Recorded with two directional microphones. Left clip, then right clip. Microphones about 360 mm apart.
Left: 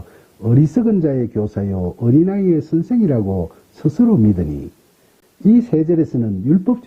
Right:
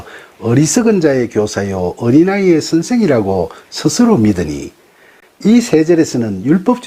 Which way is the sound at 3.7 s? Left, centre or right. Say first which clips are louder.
Right 4 dB; centre.